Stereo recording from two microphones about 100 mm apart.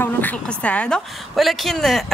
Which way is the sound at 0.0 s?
20° left (ahead or behind).